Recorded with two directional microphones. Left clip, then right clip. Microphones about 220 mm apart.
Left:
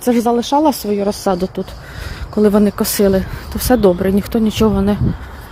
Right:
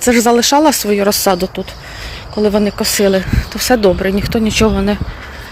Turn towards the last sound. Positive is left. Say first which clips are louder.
# right 2 dB
turn(degrees=15)  # may be behind; listen again after turning